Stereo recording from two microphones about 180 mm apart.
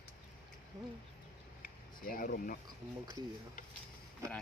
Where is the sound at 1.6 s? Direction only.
50° left (ahead or behind).